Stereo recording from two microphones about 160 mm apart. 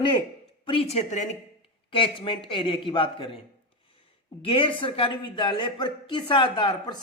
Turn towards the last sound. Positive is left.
turn(degrees=25)  # may be behind; listen again after turning